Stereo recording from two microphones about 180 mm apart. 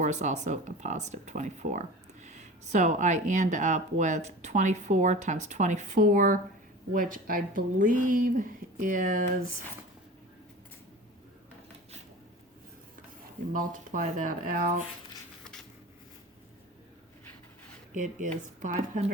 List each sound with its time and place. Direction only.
0.0 s speech: 40° right (ahead or behind)
13.5 s speech: 50° right (ahead or behind)
17.9 s speech: 45° right (ahead or behind)